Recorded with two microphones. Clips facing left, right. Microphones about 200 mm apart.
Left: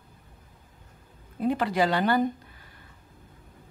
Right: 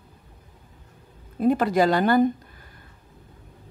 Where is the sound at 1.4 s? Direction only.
45° right (ahead or behind).